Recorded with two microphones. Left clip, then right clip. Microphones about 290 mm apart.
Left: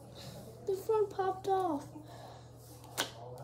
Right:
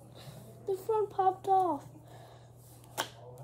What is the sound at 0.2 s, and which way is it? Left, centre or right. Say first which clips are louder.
A child's voice: left 2 dB; centre.